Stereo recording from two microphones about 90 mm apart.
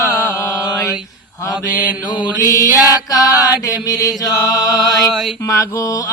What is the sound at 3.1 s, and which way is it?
Music, 45° left (ahead or behind).